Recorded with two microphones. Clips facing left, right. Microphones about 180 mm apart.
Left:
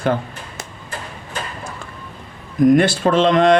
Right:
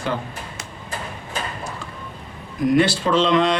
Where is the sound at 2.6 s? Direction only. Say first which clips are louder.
Left 4 dB; 50° left (ahead or behind).